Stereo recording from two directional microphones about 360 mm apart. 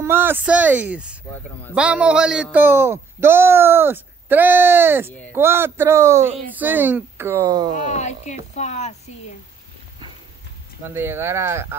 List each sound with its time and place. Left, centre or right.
0.0 s a man's voice: centre
7.9 s speech: centre
10.8 s speech: centre